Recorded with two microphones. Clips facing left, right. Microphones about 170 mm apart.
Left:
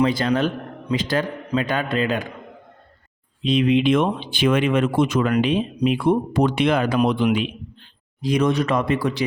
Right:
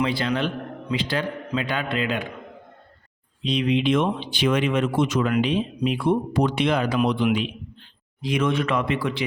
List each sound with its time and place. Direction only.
0.0 s a man's voice: 45° left (ahead or behind)
3.4 s a man's voice: 55° left (ahead or behind)
8.2 s speech: 40° left (ahead or behind)